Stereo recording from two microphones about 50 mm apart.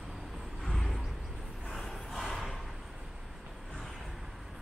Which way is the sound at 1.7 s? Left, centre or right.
Centre.